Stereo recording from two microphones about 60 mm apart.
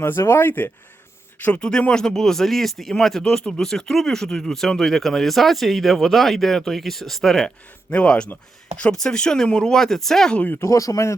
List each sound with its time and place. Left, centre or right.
0.0 s speech: left
1.6 s speech: centre
7.9 s speech: centre
10.3 s speech: left
10.6 s speech: left